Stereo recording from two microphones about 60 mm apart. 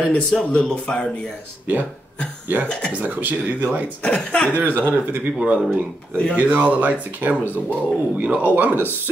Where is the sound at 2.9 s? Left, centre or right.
Right.